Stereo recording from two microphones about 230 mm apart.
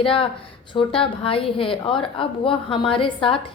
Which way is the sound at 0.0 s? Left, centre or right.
Left.